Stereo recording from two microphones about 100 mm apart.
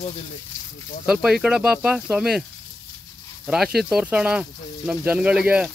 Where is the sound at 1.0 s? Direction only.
5° right (ahead or behind).